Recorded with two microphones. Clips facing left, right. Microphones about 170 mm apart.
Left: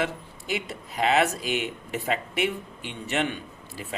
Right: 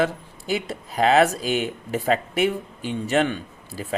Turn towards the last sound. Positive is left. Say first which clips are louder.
# right 7 dB
turn(degrees=-35)  # may be behind; listen again after turning